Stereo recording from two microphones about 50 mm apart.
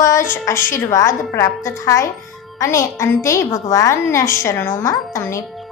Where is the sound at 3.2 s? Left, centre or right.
Left.